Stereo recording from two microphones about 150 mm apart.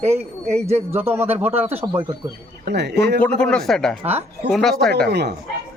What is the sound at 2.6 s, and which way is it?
Speech, 90° right.